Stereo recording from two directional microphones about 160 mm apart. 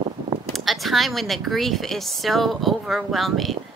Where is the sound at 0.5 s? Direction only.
Centre (ahead or behind).